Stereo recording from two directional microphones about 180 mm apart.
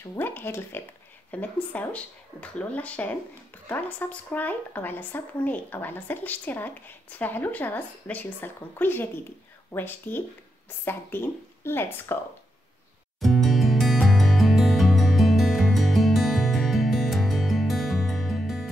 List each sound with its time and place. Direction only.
0.1 s a woman's voice: 10° left (ahead or behind)
13.2 s music: centre (ahead or behind)